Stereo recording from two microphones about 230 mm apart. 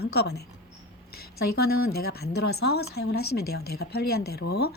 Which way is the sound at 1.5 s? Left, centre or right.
Left.